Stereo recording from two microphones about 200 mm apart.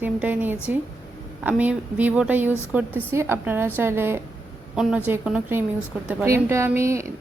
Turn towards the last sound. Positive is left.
turn(degrees=-15)  # may be behind; listen again after turning